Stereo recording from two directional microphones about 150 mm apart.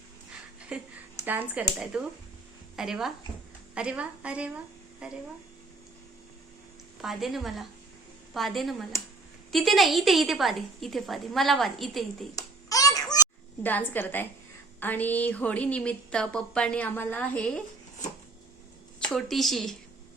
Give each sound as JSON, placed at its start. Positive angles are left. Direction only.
{"t": 0.7, "sound": "a woman's voice", "side_deg": -5}
{"t": 7.0, "sound": "a woman's voice", "side_deg": 0}
{"t": 12.4, "sound": "hands", "side_deg": 25}
{"t": 13.6, "sound": "a woman's voice", "side_deg": 10}
{"t": 19.0, "sound": "a woman's voice", "side_deg": 5}